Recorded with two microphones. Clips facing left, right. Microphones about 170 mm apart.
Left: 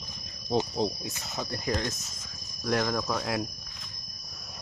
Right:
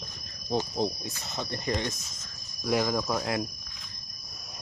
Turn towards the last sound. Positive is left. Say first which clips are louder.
# right 1 dB
turn(degrees=0)  # may be behind; listen again after turning